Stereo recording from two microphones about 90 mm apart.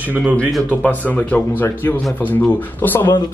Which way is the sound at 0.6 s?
20° left (ahead or behind).